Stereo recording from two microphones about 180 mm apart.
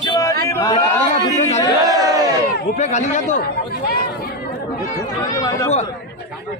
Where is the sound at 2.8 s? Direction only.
40° left (ahead or behind).